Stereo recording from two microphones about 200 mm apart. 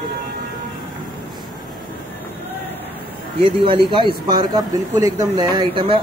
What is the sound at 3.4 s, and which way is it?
A man's voice, 25° right (ahead or behind).